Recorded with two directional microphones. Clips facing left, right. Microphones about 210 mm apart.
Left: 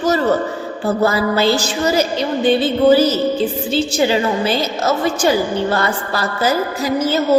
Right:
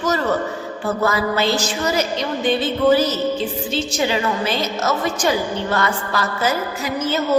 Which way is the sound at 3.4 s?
30° left (ahead or behind).